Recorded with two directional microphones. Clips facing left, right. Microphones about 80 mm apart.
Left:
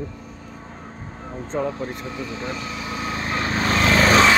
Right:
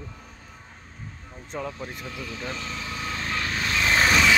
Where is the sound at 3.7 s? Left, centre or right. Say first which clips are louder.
Left 5 dB; left.